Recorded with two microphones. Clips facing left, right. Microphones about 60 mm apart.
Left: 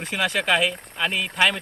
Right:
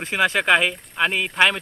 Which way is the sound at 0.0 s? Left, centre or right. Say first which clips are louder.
Right 4 dB; right.